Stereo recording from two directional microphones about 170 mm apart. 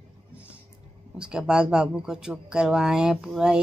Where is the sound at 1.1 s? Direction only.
5° right (ahead or behind).